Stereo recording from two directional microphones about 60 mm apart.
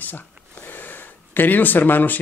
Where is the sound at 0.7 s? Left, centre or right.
Left.